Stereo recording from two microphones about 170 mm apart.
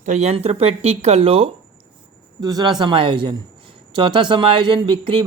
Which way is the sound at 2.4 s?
20° right (ahead or behind).